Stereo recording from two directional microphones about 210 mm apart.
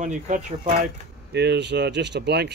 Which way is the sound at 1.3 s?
55° right (ahead or behind).